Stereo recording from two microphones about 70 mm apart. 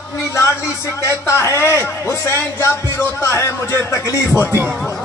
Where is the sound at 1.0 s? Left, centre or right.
Left.